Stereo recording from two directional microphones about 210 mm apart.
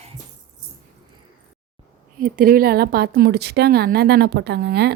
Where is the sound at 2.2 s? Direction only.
45° right (ahead or behind).